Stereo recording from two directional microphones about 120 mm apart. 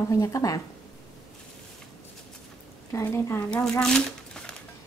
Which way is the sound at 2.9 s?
25° left (ahead or behind).